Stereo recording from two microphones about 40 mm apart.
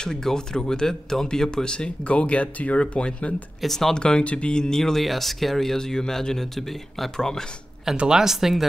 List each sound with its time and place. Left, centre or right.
0.0 s speech: centre; by 3.4 s left
3.6 s speech: centre
3.9 s speech: left
5.0 s speech: centre
8.1 s speech: centre